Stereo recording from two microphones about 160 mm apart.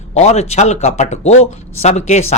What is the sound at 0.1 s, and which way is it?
Speech, 45° left (ahead or behind).